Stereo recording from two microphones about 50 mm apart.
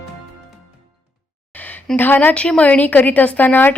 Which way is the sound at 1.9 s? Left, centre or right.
Left.